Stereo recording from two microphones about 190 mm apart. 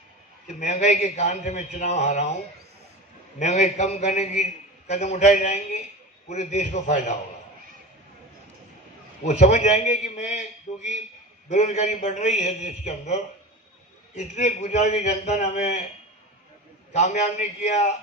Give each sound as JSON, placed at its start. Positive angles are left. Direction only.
{"t": 0.6, "sound": "a man's voice", "side_deg": 40}
{"t": 3.3, "sound": "a man's voice", "side_deg": 40}
{"t": 9.2, "sound": "a man's voice", "side_deg": 35}
{"t": 16.9, "sound": "a man's voice", "side_deg": 35}